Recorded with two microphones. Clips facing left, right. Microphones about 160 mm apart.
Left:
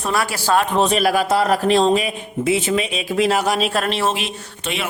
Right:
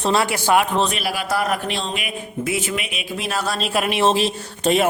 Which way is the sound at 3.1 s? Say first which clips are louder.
Left 12 dB; 90° left.